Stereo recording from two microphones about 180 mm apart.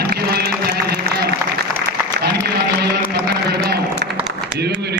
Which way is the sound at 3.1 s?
65° right (ahead or behind).